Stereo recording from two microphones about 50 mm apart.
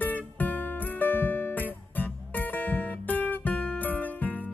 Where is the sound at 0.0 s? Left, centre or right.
Left.